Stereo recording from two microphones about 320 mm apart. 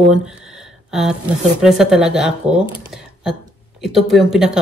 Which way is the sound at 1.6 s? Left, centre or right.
Centre.